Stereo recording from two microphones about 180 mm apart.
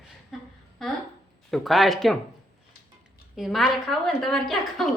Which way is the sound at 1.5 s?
Centre (ahead or behind).